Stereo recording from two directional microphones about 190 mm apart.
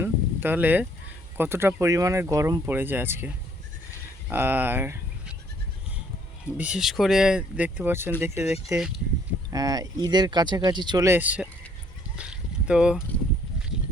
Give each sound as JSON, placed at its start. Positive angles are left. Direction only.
{"t": 0.0, "sound": "a sound", "side_deg": -10}
{"t": 1.4, "sound": "speech", "side_deg": -10}
{"t": 6.6, "sound": "speech", "side_deg": -5}
{"t": 12.1, "sound": "boat", "side_deg": -5}